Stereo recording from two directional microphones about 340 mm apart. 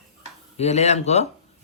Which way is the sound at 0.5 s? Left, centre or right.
Centre.